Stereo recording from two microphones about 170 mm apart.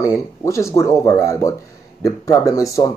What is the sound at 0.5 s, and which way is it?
Speech, 15° left (ahead or behind).